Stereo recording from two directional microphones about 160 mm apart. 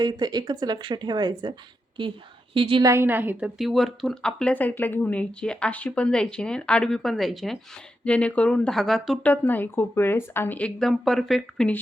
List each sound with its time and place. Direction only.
0.0 s a woman's voice: 25° right (ahead or behind)
2.8 s a woman's voice: 15° right (ahead or behind)
3.6 s speech: centre (ahead or behind)
9.3 s speech: 10° left (ahead or behind)